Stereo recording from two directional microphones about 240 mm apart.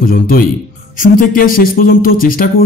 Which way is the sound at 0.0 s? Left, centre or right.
Left.